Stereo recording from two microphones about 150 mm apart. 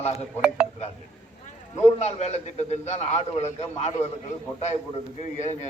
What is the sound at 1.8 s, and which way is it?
A man's voice, 45° left (ahead or behind).